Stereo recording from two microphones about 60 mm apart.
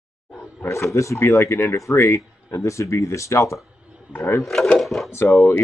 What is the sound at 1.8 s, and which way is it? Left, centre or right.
Speech, left.